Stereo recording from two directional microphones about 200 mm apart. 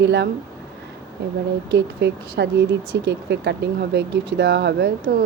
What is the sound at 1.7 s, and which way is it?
A woman's voice, 55° right (ahead or behind).